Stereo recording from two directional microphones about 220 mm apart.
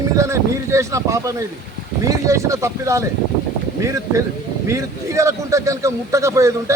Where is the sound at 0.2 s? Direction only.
15° right (ahead or behind).